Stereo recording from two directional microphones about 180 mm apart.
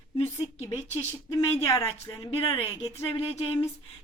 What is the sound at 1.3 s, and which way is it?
A woman's voice, 15° left (ahead or behind).